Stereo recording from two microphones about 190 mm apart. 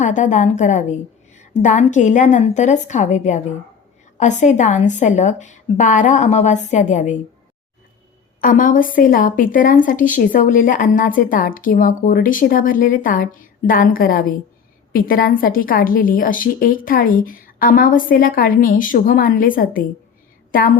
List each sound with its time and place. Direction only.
0.0 s a woman's voice: 40° left (ahead or behind)
8.4 s a woman's voice: 45° left (ahead or behind)